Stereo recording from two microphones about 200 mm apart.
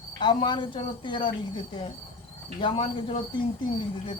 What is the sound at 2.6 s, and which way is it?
Speech, 30° left (ahead or behind).